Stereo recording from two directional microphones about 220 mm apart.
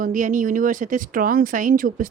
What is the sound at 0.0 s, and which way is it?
Speech, 35° right (ahead or behind).